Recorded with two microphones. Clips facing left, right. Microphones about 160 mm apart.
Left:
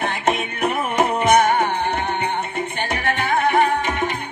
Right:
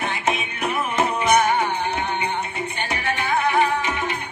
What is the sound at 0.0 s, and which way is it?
Music, 55° left (ahead or behind).